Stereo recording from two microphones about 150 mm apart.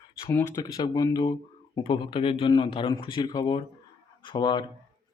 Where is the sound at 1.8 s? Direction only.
35° left (ahead or behind).